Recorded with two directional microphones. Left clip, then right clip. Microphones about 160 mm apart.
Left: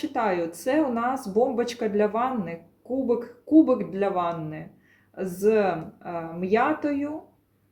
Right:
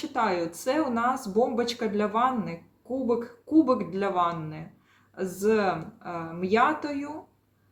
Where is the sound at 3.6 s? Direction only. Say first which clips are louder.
Left 2 dB; 10° left (ahead or behind).